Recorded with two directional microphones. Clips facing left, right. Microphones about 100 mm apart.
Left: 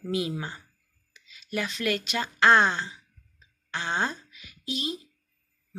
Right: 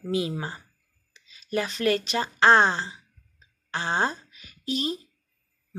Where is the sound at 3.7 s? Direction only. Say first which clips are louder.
Right 3 dB; 35° right (ahead or behind).